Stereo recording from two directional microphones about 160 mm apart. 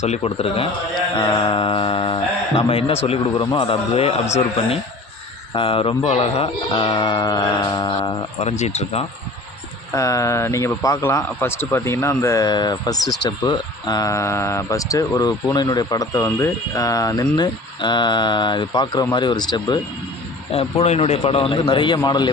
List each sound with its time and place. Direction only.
0.0 s speech: 40° left (ahead or behind)
8.4 s speech: 40° left (ahead or behind)
9.9 s a man's voice: 20° left (ahead or behind)
20.5 s speech: 40° left (ahead or behind)